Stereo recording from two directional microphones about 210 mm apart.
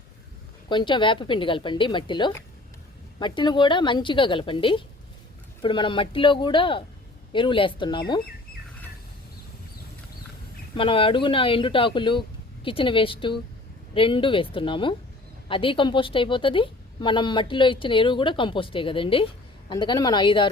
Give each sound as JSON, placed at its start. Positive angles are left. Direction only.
{"t": 0.7, "sound": "a woman's voice", "side_deg": 20}
{"t": 10.8, "sound": "a woman's voice", "side_deg": 25}